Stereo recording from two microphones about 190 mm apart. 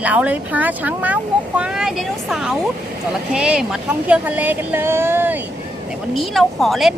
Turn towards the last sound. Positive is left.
turn(degrees=0)  # may be behind; listen again after turning